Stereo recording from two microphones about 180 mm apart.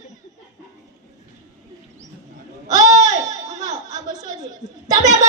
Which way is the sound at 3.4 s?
40° right (ahead or behind).